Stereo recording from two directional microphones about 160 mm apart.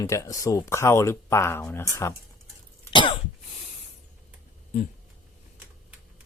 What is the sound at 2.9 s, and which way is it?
Cough, 30° left (ahead or behind).